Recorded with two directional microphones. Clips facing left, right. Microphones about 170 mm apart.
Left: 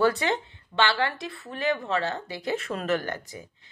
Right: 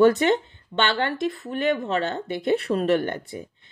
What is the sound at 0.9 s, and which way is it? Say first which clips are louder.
Speech: right 4 dB; 40° right (ahead or behind).